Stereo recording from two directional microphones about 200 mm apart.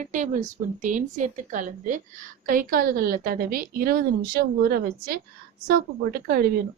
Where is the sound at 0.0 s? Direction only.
40° right (ahead or behind).